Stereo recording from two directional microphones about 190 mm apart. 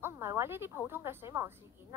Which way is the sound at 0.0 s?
10° right (ahead or behind).